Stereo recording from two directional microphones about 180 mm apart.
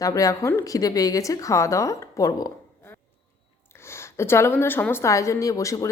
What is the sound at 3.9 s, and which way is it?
A woman's voice, 15° left (ahead or behind).